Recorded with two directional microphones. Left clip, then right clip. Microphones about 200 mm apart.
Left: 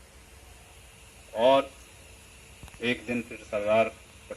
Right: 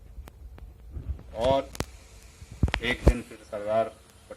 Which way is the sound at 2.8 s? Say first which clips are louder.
Even; 35° left (ahead or behind).